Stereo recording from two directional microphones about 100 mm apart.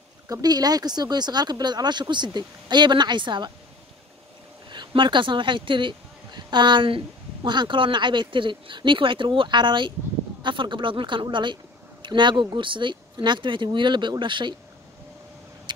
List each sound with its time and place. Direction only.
0.3 s speech: 40° right (ahead or behind)
4.6 s speech: 50° right (ahead or behind)